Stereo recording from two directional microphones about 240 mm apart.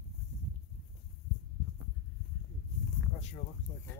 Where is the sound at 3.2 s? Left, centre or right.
Left.